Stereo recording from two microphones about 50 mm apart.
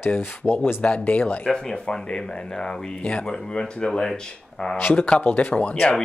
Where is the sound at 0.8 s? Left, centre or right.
Left.